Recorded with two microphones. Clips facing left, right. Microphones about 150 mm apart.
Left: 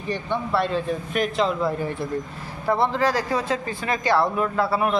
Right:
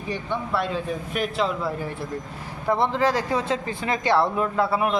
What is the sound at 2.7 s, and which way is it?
Speech, 20° right (ahead or behind).